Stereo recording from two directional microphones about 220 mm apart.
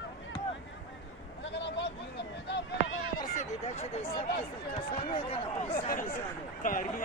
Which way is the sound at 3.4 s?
30° left (ahead or behind).